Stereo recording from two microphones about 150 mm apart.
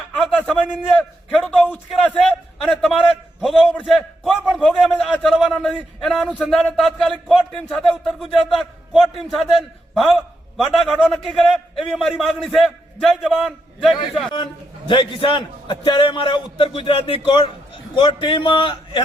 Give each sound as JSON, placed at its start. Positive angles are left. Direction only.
{"t": 0.1, "sound": "a sound", "side_deg": 5}
{"t": 0.6, "sound": "a man's voice", "side_deg": 10}
{"t": 3.4, "sound": "a man's voice", "side_deg": 0}
{"t": 9.9, "sound": "a sound", "side_deg": 0}
{"t": 10.7, "sound": "a man's voice", "side_deg": 5}
{"t": 14.8, "sound": "a man's voice", "side_deg": 35}